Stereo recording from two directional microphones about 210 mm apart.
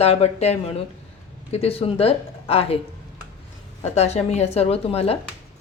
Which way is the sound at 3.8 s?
30° left (ahead or behind).